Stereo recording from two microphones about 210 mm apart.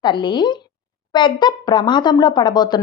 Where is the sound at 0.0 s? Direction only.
20° left (ahead or behind).